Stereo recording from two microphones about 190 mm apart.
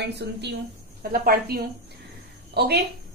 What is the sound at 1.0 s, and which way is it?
A woman's voice, 50° right (ahead or behind).